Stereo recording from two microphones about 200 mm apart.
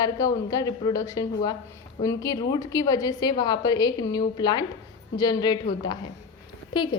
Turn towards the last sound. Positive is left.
turn(degrees=25)  # may be behind; listen again after turning